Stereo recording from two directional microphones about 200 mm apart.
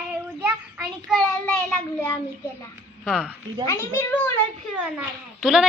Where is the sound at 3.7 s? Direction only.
15° left (ahead or behind).